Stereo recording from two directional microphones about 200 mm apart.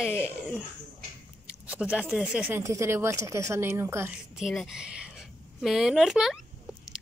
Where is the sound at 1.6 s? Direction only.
5° right (ahead or behind).